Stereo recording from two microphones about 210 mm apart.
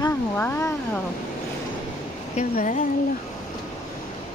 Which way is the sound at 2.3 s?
35° left (ahead or behind).